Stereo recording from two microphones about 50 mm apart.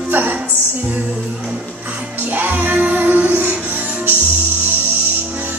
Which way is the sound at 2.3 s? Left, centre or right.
Right.